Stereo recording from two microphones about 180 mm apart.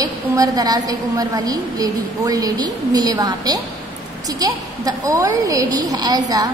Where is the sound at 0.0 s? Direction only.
20° right (ahead or behind).